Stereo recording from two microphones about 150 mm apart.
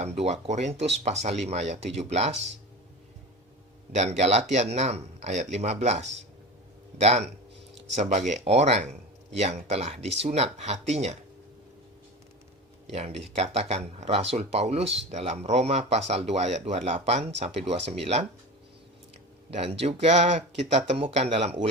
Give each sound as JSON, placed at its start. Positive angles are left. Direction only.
{"t": 0.0, "sound": "speech", "side_deg": -45}
{"t": 3.9, "sound": "speech", "side_deg": -45}
{"t": 8.3, "sound": "speech", "side_deg": -45}
{"t": 12.9, "sound": "speech", "side_deg": -45}
{"t": 19.5, "sound": "speech", "side_deg": -45}